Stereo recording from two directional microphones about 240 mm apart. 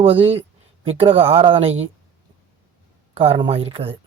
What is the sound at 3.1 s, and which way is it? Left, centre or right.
Speech, right.